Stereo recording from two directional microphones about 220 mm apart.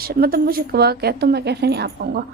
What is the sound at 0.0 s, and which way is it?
A woman's voice, 40° right (ahead or behind).